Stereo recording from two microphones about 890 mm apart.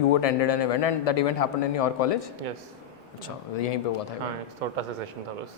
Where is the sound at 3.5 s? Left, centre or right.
Left.